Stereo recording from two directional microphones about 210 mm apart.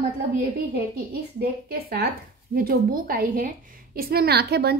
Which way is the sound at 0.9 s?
45° right (ahead or behind).